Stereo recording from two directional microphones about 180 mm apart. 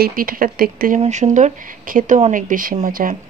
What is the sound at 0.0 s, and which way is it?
Speech, 55° right (ahead or behind).